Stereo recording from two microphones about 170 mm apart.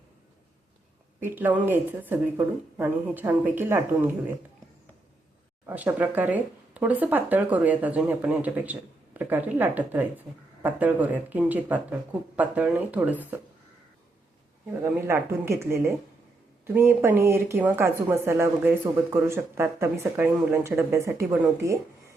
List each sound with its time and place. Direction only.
1.2 s speech: 10° right (ahead or behind)
5.6 s speech: 10° right (ahead or behind)
14.9 s speech: 15° right (ahead or behind)